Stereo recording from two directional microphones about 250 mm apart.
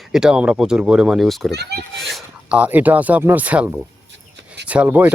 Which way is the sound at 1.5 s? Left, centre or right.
Right.